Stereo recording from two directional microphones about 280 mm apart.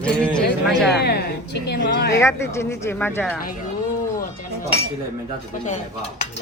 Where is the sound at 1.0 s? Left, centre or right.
Left.